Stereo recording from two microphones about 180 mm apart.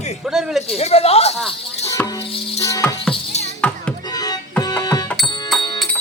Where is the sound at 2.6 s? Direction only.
15° left (ahead or behind).